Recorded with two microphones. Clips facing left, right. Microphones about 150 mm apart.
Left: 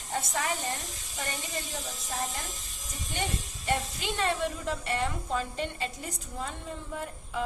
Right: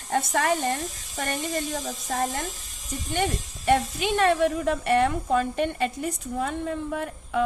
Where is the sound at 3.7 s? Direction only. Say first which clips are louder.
Right 9 dB; 60° right (ahead or behind).